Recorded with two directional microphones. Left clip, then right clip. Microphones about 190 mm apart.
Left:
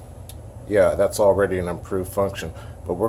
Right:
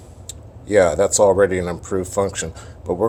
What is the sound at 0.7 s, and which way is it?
Speech, 35° right (ahead or behind).